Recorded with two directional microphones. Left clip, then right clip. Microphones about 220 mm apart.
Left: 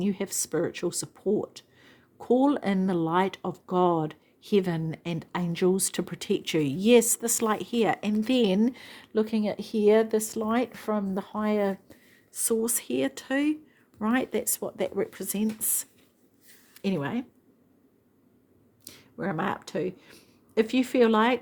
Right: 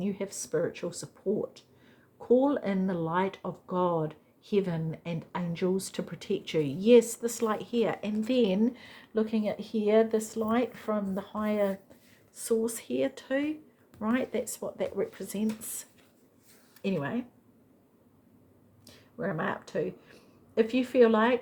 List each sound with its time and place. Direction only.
0.0 s speech: 50° left (ahead or behind)
18.9 s speech: 50° left (ahead or behind)